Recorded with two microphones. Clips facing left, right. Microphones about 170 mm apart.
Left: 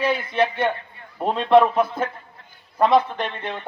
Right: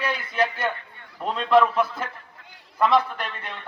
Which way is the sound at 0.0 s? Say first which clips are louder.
Left 4 dB; 30° left (ahead or behind).